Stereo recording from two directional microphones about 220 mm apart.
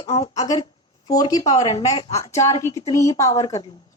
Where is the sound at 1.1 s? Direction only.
15° left (ahead or behind).